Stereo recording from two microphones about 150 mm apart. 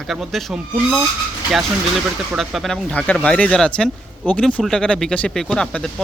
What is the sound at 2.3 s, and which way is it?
Speech, centre (ahead or behind).